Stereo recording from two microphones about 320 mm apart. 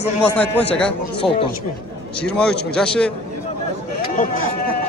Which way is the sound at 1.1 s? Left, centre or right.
Centre.